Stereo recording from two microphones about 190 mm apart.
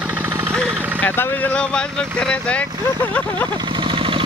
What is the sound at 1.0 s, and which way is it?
Speech, 10° left (ahead or behind).